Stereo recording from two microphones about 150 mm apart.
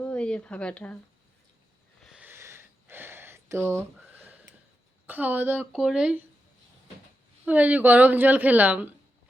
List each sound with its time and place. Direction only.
0.0 s speech: 10° left (ahead or behind)
2.1 s a sound: 15° right (ahead or behind)
5.0 s a woman's voice: 10° right (ahead or behind)
7.4 s a woman's voice: 10° right (ahead or behind)